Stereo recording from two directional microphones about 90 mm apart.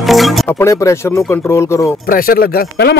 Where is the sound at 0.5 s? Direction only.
30° left (ahead or behind).